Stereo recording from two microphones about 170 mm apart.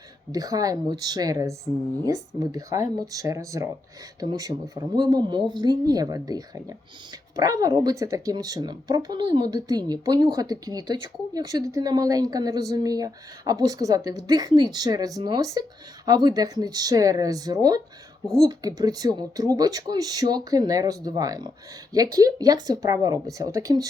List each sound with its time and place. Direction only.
0.3 s speech: 20° right (ahead or behind)